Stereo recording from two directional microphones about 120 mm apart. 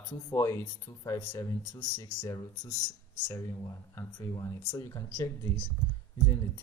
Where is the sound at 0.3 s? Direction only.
25° left (ahead or behind).